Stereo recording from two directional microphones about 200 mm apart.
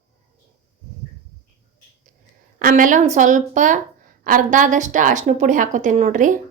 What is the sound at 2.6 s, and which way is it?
A woman's voice, 45° right (ahead or behind).